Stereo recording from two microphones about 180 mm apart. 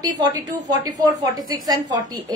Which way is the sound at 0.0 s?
20° right (ahead or behind).